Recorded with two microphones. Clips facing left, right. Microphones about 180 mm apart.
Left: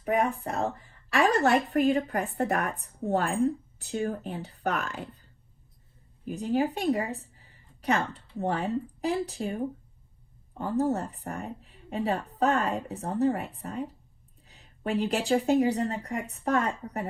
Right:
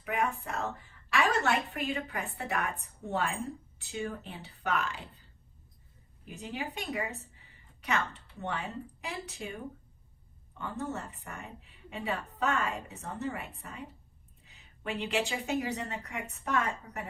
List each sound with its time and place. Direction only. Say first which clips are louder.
0.0 s a woman's voice: left 6 dB; 40° left (ahead or behind)
6.2 s a woman's voice: left 12 dB; 40° left (ahead or behind)